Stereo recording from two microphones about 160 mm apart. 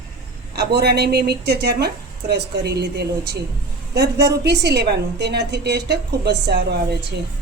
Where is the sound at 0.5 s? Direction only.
90° right.